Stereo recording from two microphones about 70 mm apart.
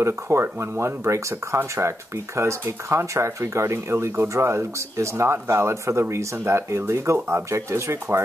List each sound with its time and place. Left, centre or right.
0.0 s speech: right